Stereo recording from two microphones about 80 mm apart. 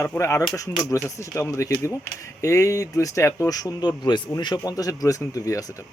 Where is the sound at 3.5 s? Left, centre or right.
Left.